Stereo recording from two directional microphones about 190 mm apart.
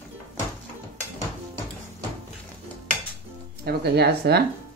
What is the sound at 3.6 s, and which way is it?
Speech, 60° right (ahead or behind).